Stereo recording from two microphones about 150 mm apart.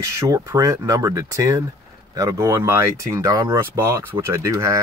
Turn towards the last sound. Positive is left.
turn(degrees=-20)  # may be behind; listen again after turning